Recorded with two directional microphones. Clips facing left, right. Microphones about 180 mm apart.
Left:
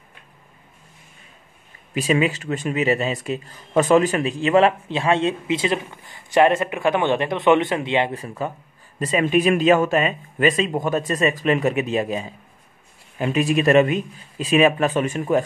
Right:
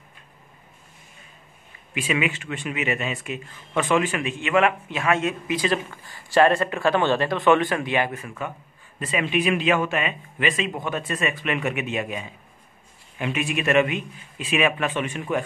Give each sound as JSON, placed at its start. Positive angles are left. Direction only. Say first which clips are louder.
{"t": 2.0, "sound": "speech", "louder": "left 5 dB", "side_deg": 40}